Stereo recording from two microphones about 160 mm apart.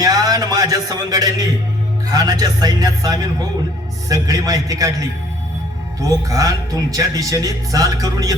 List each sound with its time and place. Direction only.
0.0 s a man's voice: 25° right (ahead or behind)